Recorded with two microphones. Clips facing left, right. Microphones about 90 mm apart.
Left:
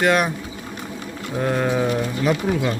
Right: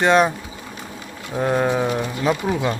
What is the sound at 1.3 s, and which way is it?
Speech, 20° right (ahead or behind).